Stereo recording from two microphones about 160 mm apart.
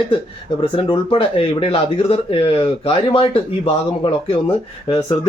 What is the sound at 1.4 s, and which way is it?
Speech, 35° left (ahead or behind).